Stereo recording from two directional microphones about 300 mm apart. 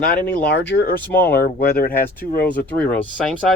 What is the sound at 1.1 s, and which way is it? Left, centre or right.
Speech, centre.